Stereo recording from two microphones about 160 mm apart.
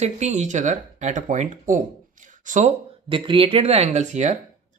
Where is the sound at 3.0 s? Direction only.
35° right (ahead or behind).